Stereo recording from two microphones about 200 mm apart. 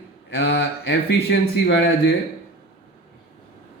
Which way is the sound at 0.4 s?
55° left (ahead or behind).